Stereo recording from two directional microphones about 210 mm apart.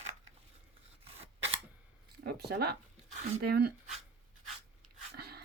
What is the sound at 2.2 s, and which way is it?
Speech, 50° right (ahead or behind).